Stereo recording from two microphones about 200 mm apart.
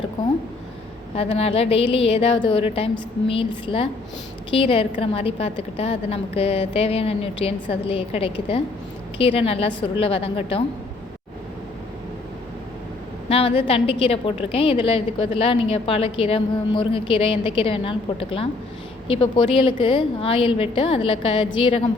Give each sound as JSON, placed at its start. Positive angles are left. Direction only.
{"t": 1.1, "sound": "a woman's voice", "side_deg": 30}
{"t": 13.2, "sound": "a woman's voice", "side_deg": 30}